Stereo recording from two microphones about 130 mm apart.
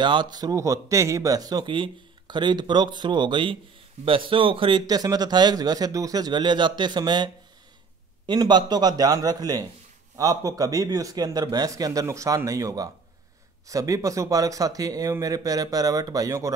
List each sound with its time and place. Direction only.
0.0 s speech: 35° right (ahead or behind)
8.3 s speech: 35° right (ahead or behind)